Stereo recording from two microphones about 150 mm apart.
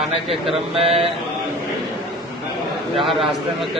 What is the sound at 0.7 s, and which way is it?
Mantra, 40° right (ahead or behind).